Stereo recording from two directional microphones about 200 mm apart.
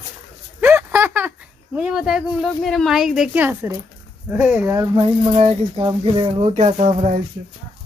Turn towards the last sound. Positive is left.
turn(degrees=-35)  # may be behind; listen again after turning